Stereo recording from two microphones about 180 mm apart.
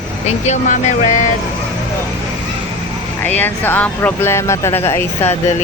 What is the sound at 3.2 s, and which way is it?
Speech, 10° left (ahead or behind).